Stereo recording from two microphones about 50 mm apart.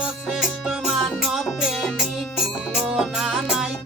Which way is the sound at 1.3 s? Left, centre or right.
Centre.